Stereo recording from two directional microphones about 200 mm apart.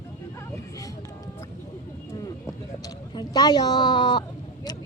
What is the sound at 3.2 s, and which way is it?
Speech, 20° left (ahead or behind).